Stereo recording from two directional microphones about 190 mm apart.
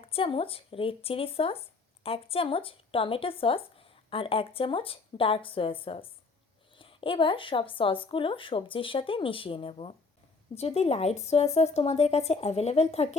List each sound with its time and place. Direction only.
0.1 s speech: 30° left (ahead or behind)